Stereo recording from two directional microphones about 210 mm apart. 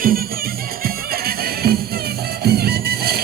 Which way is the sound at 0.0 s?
45° right (ahead or behind).